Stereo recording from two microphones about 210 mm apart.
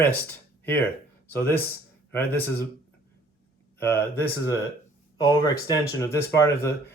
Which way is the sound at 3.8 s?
10° left (ahead or behind).